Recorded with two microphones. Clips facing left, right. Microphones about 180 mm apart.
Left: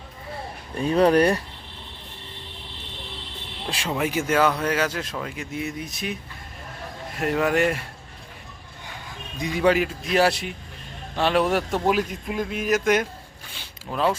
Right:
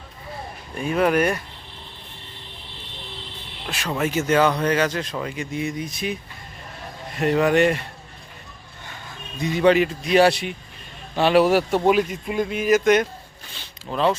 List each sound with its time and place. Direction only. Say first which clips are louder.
0.8 s speech: left 2 dB; 35° left (ahead or behind)
3.7 s speech: even; 30° left (ahead or behind)
3.9 s speech: right 3 dB; 10° left (ahead or behind)
9.4 s speech: right 3 dB; 10° left (ahead or behind)
13.5 s zipper: right 2 dB; 10° left (ahead or behind)